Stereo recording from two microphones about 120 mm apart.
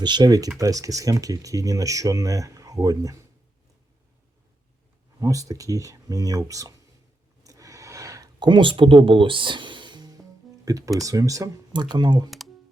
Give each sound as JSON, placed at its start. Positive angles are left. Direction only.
{"t": 0.0, "sound": "speech", "side_deg": -35}
{"t": 5.2, "sound": "speech", "side_deg": -30}
{"t": 7.4, "sound": "a sound", "side_deg": -30}
{"t": 8.4, "sound": "speech", "side_deg": -45}